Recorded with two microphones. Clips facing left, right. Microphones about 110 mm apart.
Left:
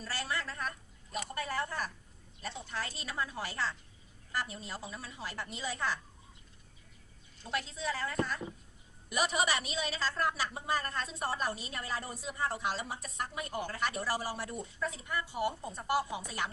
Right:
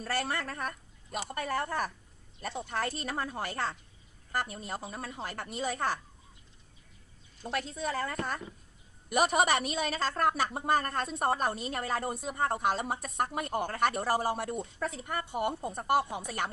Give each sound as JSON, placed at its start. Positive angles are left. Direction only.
{"t": 0.0, "sound": "a woman's voice", "side_deg": -55}
{"t": 7.4, "sound": "a woman's voice", "side_deg": -50}